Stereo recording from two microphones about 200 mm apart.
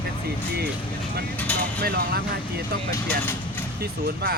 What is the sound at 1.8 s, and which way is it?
Speech, 50° right (ahead or behind).